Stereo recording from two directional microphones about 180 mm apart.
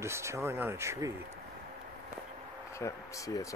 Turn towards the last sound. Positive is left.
turn(degrees=20)  # may be behind; listen again after turning